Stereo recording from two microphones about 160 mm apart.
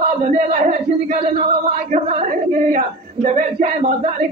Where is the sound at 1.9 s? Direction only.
50° right (ahead or behind).